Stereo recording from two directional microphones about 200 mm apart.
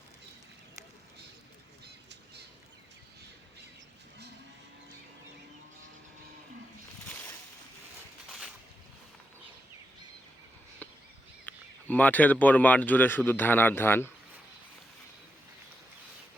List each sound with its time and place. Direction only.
1.8 s bird flight: 55° right (ahead or behind)
8.3 s boat: centre (ahead or behind)
10.8 s chop: 10° left (ahead or behind)
11.4 s speech: 10° left (ahead or behind)